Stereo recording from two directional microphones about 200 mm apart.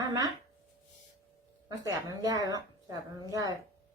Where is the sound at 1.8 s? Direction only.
20° right (ahead or behind).